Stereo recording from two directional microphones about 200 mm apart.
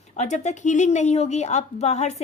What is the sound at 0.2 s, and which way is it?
Speech, 35° left (ahead or behind).